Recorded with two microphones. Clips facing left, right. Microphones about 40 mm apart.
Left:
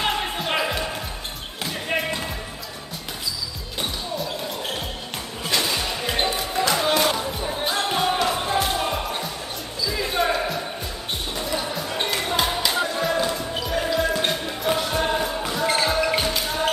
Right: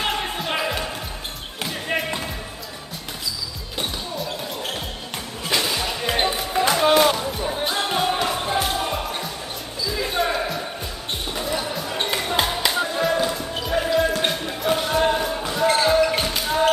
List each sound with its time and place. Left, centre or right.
0.0 s music: centre
5.5 s music: centre
6.8 s music: centre
7.1 s music: centre
9.9 s basketball bounce: centre